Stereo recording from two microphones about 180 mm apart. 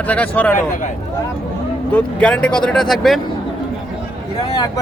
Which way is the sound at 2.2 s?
5° left (ahead or behind).